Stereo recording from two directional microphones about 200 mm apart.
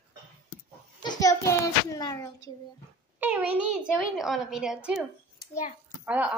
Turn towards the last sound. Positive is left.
turn(degrees=-10)  # may be behind; listen again after turning